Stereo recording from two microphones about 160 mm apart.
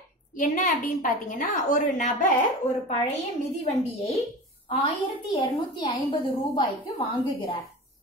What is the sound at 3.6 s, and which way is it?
Speech, 45° left (ahead or behind).